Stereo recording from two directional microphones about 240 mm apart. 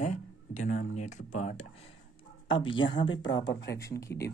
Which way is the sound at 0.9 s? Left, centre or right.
Left.